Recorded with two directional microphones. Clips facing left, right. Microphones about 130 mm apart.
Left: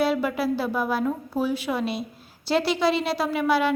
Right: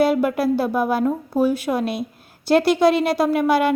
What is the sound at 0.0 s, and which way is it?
A woman's voice, 50° right (ahead or behind).